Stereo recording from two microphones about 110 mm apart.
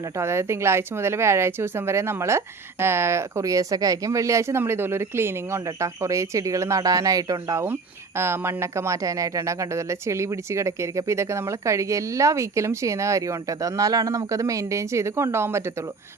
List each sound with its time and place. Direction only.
0.2 s speech: 25° right (ahead or behind)